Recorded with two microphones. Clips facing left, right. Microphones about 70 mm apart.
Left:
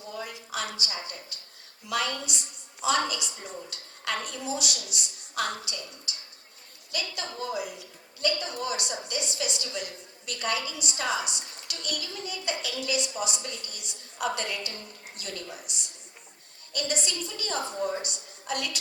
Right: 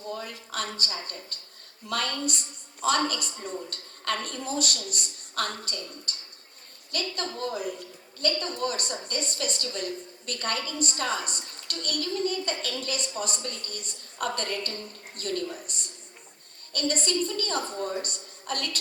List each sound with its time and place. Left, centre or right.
0.1 s a woman's voice: right
16.7 s a woman's voice: right